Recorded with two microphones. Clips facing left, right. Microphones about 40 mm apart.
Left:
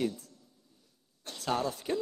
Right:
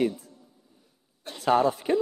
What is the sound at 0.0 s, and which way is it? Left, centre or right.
A man's voice, centre.